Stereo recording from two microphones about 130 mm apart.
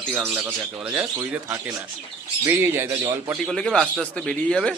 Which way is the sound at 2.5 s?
15° right (ahead or behind).